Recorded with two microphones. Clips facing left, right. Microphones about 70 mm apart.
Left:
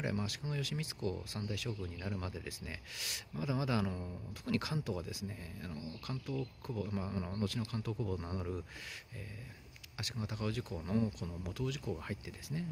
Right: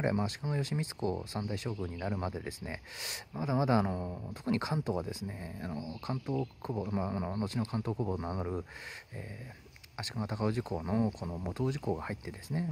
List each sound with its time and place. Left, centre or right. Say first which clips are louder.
0.0 s speech: right 6 dB; right
9.9 s speech: right 6 dB; right